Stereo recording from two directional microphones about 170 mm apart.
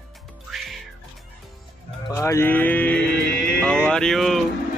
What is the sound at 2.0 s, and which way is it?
Speech, 15° left (ahead or behind).